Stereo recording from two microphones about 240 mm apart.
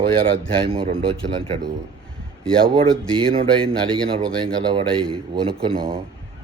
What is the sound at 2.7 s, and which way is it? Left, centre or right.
Speech, right.